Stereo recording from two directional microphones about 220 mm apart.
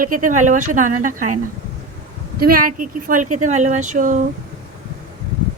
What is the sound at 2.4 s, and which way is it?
A woman's voice, 40° right (ahead or behind).